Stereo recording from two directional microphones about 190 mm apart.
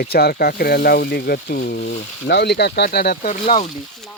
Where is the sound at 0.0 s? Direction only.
55° left (ahead or behind).